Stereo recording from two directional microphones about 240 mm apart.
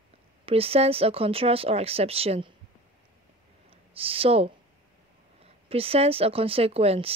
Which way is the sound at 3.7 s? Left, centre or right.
Right.